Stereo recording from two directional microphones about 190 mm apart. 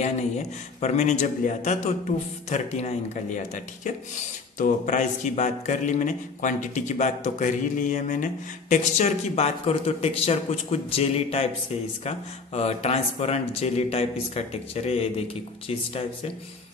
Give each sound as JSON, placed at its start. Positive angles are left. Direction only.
{"t": 0.7, "sound": "a man's voice", "side_deg": 35}